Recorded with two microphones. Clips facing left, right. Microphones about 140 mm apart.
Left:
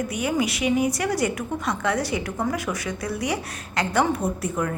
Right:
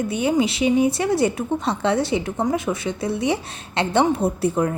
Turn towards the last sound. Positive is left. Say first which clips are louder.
# right 5 dB
turn(degrees=-30)  # may be behind; listen again after turning